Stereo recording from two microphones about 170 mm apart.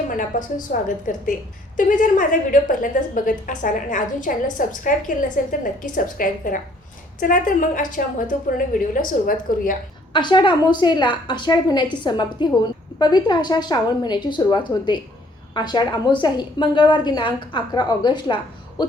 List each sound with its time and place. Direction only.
0.1 s a woman's voice: 50° left (ahead or behind)
10.1 s a woman's voice: 25° left (ahead or behind)